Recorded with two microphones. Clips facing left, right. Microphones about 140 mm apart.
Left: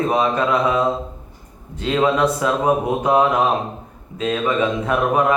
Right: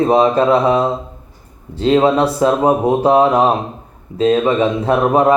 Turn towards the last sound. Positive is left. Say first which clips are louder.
# right 5 dB
turn(degrees=-30)  # may be behind; listen again after turning